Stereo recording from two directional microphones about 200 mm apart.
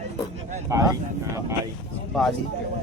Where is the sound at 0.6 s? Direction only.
15° right (ahead or behind).